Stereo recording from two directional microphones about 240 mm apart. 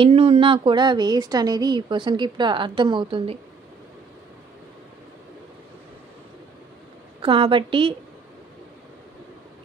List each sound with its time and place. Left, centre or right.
0.0 s speech: right
7.2 s speech: right